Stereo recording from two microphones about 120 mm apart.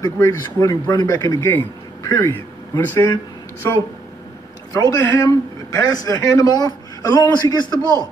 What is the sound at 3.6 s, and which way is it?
A man's voice, 25° left (ahead or behind).